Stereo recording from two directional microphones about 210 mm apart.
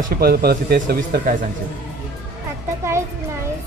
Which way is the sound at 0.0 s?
45° right (ahead or behind).